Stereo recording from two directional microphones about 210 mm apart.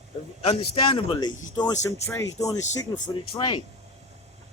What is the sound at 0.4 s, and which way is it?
Speech, 25° left (ahead or behind).